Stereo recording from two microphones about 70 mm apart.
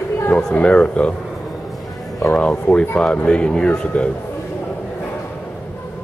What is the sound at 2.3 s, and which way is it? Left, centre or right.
Speech, centre.